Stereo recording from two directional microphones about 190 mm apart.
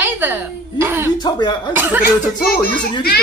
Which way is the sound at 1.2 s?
25° left (ahead or behind).